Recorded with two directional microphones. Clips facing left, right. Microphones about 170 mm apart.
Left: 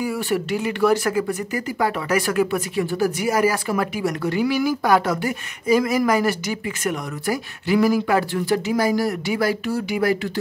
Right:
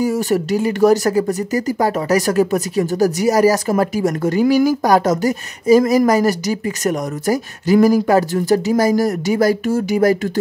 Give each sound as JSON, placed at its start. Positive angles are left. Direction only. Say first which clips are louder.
{"t": 0.0, "sound": "speech", "louder": "right 6 dB", "side_deg": -40}